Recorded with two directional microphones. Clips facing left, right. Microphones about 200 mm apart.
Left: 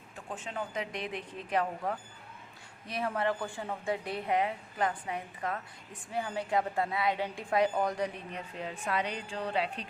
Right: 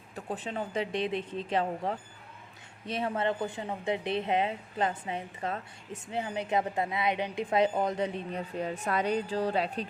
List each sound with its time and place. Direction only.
0.3 s speech: 35° right (ahead or behind)